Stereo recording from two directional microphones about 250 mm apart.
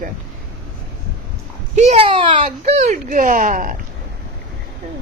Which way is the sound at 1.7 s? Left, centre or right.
Right.